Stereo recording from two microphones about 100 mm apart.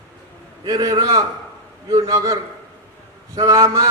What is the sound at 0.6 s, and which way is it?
A man's voice, 40° right (ahead or behind).